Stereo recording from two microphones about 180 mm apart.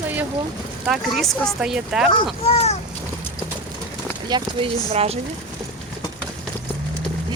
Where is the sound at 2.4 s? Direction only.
35° left (ahead or behind).